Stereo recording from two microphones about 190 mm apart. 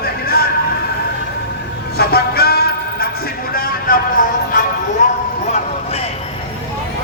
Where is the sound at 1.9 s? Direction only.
55° left (ahead or behind).